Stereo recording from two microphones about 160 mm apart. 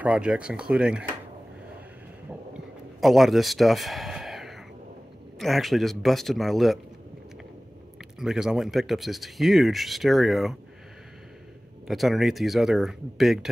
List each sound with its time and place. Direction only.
0.0 s speech: 5° right (ahead or behind)
2.5 s a sound: centre (ahead or behind)
5.4 s speech: centre (ahead or behind)
8.2 s speech: 5° right (ahead or behind)
11.9 s speech: centre (ahead or behind)